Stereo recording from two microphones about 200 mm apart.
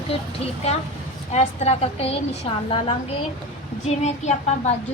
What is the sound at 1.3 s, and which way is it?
A woman's voice, 35° left (ahead or behind).